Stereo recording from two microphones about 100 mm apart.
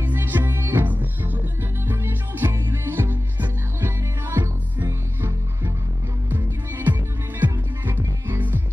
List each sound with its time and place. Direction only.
0.0 s music: 20° right (ahead or behind)
6.3 s music: 20° right (ahead or behind)